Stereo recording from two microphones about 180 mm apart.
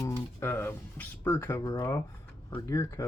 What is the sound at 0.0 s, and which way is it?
Speech, 15° left (ahead or behind).